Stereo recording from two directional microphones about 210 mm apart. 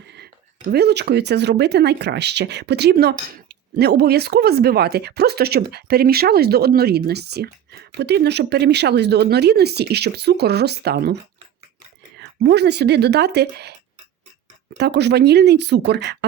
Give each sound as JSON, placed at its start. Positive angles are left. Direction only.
{"t": 0.7, "sound": "speech", "side_deg": -50}